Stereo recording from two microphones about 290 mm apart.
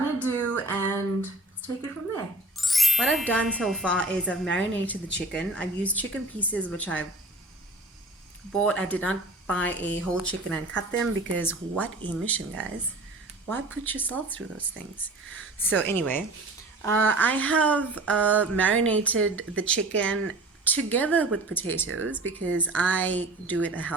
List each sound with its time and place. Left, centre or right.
0.5 s a sound: centre
2.6 s ding: centre
5.3 s speech: centre
8.5 s speech: centre
21.8 s speech: right
22.2 s speech: centre